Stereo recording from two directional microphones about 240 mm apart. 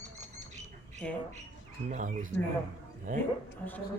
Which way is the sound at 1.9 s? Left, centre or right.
Right.